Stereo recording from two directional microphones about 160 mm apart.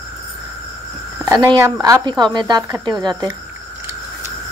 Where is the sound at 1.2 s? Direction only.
20° right (ahead or behind).